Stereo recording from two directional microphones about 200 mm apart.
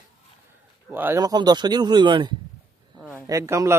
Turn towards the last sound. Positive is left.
turn(degrees=-15)  # may be behind; listen again after turning